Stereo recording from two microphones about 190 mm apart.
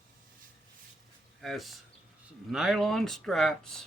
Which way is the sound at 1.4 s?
Centre (ahead or behind).